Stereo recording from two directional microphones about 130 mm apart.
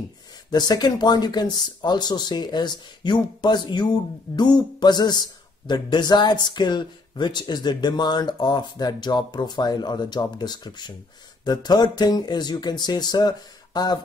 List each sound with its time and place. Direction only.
0.5 s speech: 30° left (ahead or behind)